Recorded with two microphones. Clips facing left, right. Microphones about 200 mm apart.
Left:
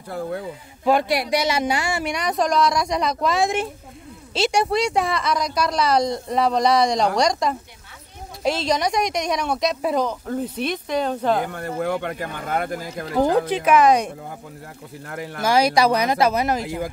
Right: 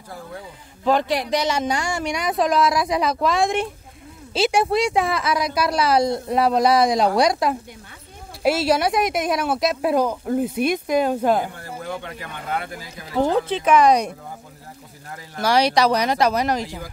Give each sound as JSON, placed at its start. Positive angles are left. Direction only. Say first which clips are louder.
{"t": 0.8, "sound": "speech", "louder": "left 1 dB", "side_deg": 10}
{"t": 11.5, "sound": "speech", "louder": "left 7 dB", "side_deg": 65}
{"t": 13.2, "sound": "speech", "louder": "left 1 dB", "side_deg": 10}
{"t": 15.0, "sound": "speech", "louder": "left 4 dB", "side_deg": 65}
{"t": 15.5, "sound": "speech", "louder": "even", "side_deg": 10}
{"t": 16.6, "sound": "speech", "louder": "left 6 dB", "side_deg": 55}